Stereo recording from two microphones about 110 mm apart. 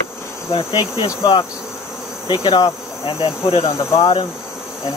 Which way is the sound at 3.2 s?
55° left (ahead or behind).